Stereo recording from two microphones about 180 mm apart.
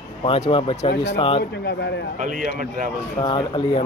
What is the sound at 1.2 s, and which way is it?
Speech, 30° left (ahead or behind).